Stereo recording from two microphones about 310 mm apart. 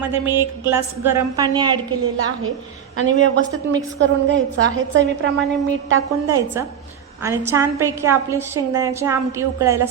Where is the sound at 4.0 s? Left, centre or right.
Right.